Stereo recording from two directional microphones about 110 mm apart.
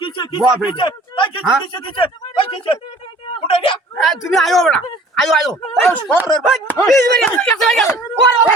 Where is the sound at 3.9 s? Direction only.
Centre (ahead or behind).